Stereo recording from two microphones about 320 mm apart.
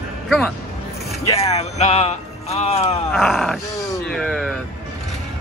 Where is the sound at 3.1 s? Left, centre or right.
Centre.